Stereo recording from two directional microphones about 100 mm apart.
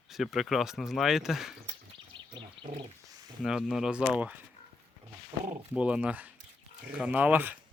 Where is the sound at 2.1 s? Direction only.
60° right (ahead or behind).